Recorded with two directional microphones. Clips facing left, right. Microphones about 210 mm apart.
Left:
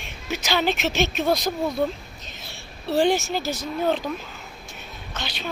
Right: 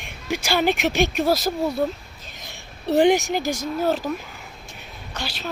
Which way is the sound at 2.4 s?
15° right (ahead or behind).